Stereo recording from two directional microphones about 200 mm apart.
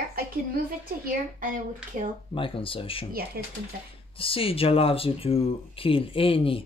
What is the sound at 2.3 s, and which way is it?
Speech, 25° left (ahead or behind).